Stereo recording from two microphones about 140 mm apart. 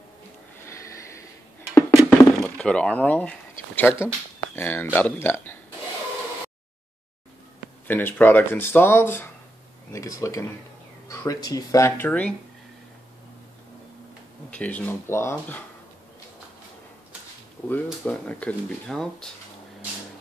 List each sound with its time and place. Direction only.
0.7 s snort: 20° left (ahead or behind)
2.0 s a sound: centre (ahead or behind); by 4.1 s 15° left (ahead or behind)
4.6 s speech: 15° left (ahead or behind)
7.9 s speech: 15° left (ahead or behind)
12.1 s speech: 10° left (ahead or behind)
14.5 s speech: 10° left (ahead or behind)
18.0 s speech: 10° left (ahead or behind)